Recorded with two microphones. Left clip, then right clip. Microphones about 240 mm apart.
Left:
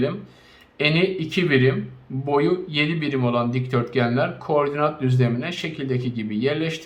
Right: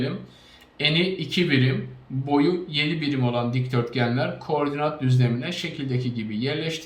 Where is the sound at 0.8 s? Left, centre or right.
Centre.